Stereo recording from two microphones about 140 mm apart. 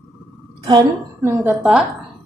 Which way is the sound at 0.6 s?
30° right (ahead or behind).